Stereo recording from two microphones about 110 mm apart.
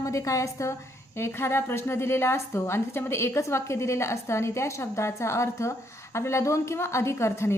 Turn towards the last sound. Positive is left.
turn(degrees=25)  # may be behind; listen again after turning